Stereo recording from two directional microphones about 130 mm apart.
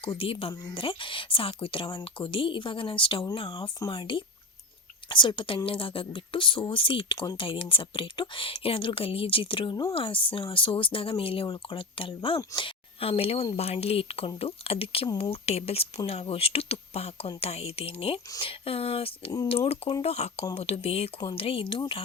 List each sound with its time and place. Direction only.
0.2 s speech: 45° left (ahead or behind)